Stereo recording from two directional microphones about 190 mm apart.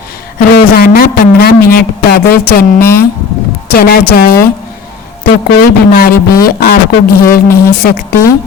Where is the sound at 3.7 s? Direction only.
55° left (ahead or behind).